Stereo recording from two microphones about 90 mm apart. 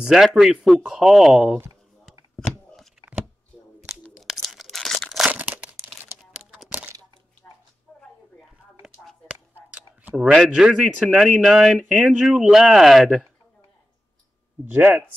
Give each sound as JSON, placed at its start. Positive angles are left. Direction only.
{"t": 0.1, "sound": "a man's voice", "side_deg": -5}
{"t": 4.0, "sound": "crumpling", "side_deg": 0}
{"t": 5.3, "sound": "crumpling", "side_deg": -15}
{"t": 7.9, "sound": "a sound", "side_deg": 10}
{"t": 10.5, "sound": "a man's voice", "side_deg": -5}
{"t": 14.7, "sound": "speech", "side_deg": -20}